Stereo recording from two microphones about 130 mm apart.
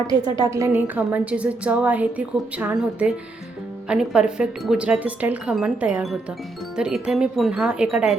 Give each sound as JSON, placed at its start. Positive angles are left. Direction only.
{"t": 0.4, "sound": "a woman's voice", "side_deg": -25}
{"t": 0.8, "sound": "a woman's voice", "side_deg": -10}